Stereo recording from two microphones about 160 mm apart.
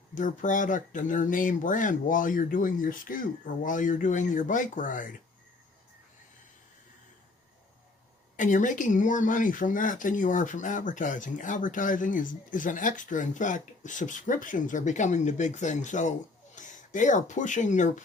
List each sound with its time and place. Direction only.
0.1 s speech: 55° left (ahead or behind)
8.4 s speech: 55° left (ahead or behind)